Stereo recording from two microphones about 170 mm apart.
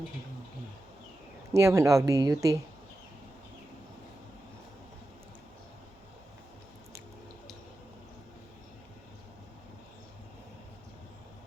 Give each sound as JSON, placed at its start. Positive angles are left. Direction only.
{"t": 1.5, "sound": "speech", "side_deg": -20}